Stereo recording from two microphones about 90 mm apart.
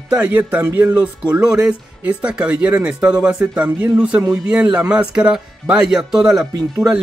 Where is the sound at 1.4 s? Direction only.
10° right (ahead or behind).